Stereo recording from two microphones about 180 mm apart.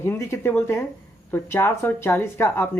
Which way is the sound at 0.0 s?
15° left (ahead or behind).